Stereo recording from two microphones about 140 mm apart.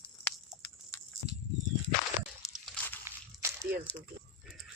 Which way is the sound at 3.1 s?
20° right (ahead or behind).